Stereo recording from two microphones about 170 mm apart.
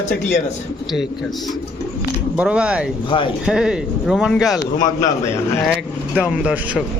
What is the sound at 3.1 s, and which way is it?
Speech, 30° left (ahead or behind).